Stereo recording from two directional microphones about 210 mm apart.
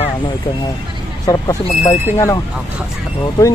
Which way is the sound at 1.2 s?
20° left (ahead or behind).